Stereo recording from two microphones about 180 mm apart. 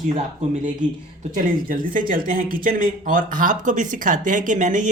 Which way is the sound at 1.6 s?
50° right (ahead or behind).